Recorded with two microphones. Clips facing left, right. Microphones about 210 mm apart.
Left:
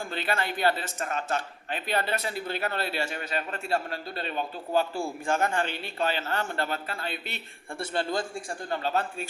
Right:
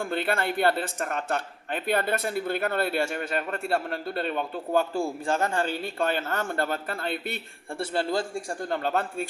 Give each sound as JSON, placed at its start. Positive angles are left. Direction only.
{"t": 0.0, "sound": "speech", "side_deg": -55}
{"t": 5.2, "sound": "speech", "side_deg": -35}
{"t": 7.8, "sound": "a man's voice", "side_deg": -30}
{"t": 8.4, "sound": "speech", "side_deg": -55}